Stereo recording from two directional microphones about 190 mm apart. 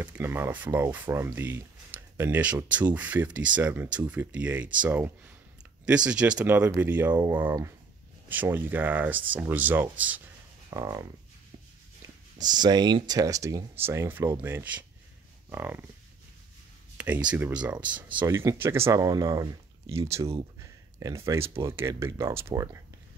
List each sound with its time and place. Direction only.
0.0 s speech: 10° right (ahead or behind)
12.4 s speech: 20° right (ahead or behind)
16.9 s a sound: 5° right (ahead or behind)
17.3 s speech: 5° right (ahead or behind)